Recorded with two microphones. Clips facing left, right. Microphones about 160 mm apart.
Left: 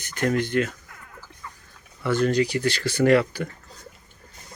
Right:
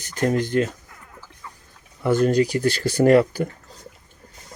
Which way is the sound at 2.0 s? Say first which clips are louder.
Right 3 dB; 45° right (ahead or behind).